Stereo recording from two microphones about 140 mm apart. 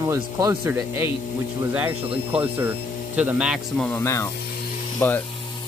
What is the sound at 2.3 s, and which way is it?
Speech, 15° right (ahead or behind).